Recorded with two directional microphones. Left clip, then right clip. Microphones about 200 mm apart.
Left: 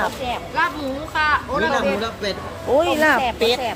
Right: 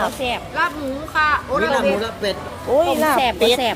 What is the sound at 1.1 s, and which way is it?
Speech, centre (ahead or behind).